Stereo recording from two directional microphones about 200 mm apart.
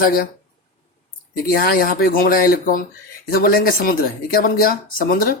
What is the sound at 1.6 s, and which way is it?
Speech, 45° left (ahead or behind).